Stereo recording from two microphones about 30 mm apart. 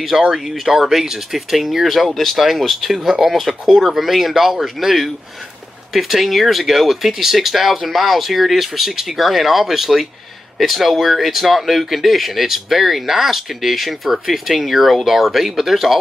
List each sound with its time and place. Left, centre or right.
0.3 s speech: centre
3.0 s speech: centre